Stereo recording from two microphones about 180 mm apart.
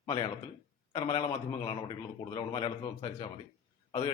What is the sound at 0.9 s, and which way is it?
A man's voice, 25° left (ahead or behind).